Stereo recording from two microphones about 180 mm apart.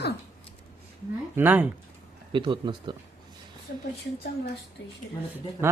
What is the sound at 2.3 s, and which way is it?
Speech, 30° right (ahead or behind).